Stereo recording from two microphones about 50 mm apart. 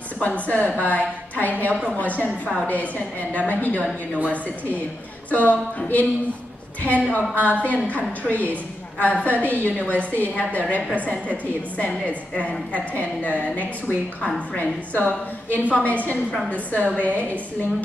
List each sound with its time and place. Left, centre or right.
0.5 s a woman's voice: left
5.3 s a woman's voice: left